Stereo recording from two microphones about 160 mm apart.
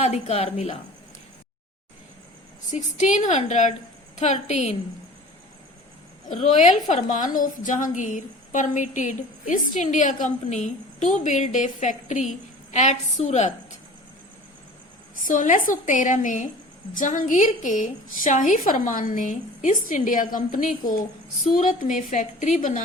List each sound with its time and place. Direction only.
0.0 s a woman's voice: 40° left (ahead or behind)
2.7 s a woman's voice: 50° left (ahead or behind)
6.2 s a woman's voice: 50° left (ahead or behind)
15.2 s a woman's voice: 55° left (ahead or behind)